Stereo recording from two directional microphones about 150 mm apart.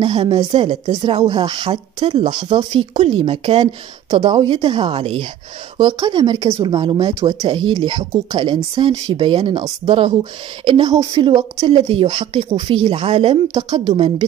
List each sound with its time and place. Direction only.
0.0 s speech: 35° right (ahead or behind)
5.8 s speech: 30° right (ahead or behind)
11.1 s speech: 35° right (ahead or behind)